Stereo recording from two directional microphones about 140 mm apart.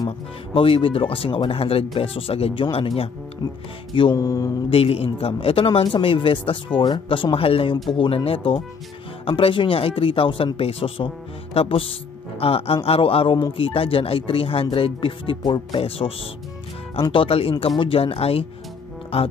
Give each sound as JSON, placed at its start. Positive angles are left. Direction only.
{"t": 0.6, "sound": "speech", "side_deg": 40}
{"t": 3.9, "sound": "speech", "side_deg": 40}
{"t": 4.2, "sound": "mantra", "side_deg": 25}
{"t": 4.6, "sound": "speech", "side_deg": 40}
{"t": 17.1, "sound": "speech", "side_deg": 40}